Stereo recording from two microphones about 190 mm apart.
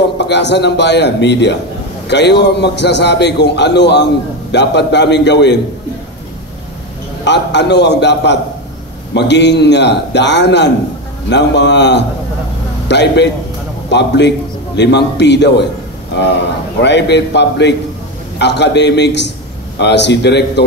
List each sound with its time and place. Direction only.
0.2 s a man's voice: 65° left (ahead or behind)
7.2 s a man's voice: 65° left (ahead or behind)